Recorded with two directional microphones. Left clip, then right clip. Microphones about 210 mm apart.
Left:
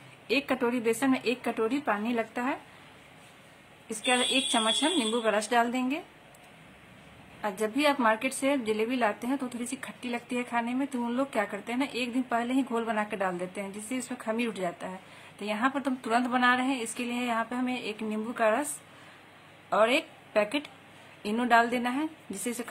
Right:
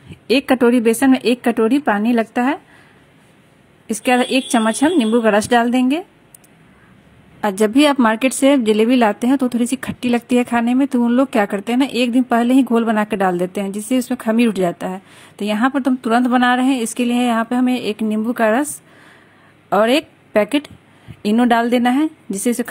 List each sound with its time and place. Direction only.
0.3 s a woman's voice: 35° right (ahead or behind)
3.8 s a woman's voice: 40° right (ahead or behind)
7.4 s a woman's voice: 40° right (ahead or behind)
19.7 s a woman's voice: 40° right (ahead or behind)